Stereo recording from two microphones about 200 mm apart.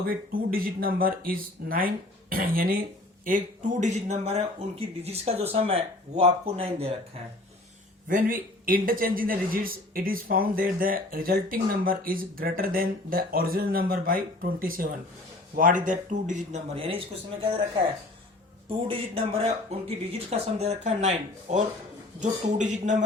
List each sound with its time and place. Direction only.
0.1 s a man's voice: 45° right (ahead or behind); by 6.9 s 30° right (ahead or behind)
8.0 s a man's voice: 45° right (ahead or behind); by 17.0 s 30° right (ahead or behind)
18.9 s speech: 30° right (ahead or behind)